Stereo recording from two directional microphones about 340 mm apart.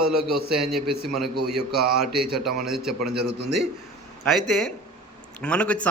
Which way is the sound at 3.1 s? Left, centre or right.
Right.